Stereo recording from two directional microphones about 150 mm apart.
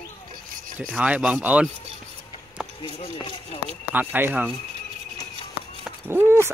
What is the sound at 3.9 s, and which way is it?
Speech, 10° right (ahead or behind).